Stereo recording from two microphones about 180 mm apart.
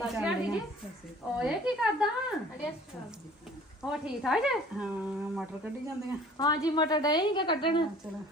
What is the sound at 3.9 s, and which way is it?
Speech, 5° right (ahead or behind).